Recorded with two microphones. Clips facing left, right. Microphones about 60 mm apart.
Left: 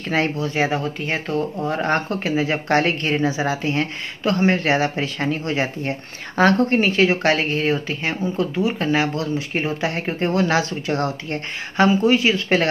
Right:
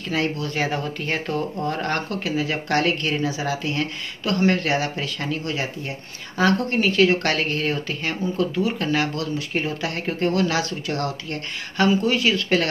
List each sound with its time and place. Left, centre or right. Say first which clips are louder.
0.1 s a woman's voice: left 3 dB; left
0.7 s speech: left 2 dB; centre
1.8 s a woman's voice: left 4 dB; left